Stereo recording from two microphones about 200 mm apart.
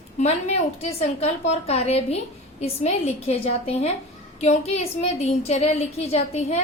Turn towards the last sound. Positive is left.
turn(degrees=35)  # may be behind; listen again after turning